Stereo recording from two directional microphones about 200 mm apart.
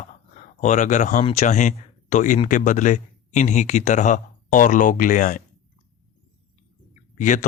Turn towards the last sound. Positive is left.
turn(degrees=40)  # may be behind; listen again after turning